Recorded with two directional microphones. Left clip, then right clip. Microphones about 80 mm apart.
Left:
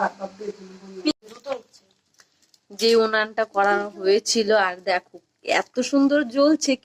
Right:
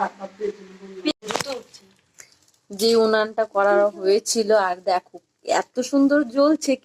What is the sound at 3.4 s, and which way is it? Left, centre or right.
Speech, left.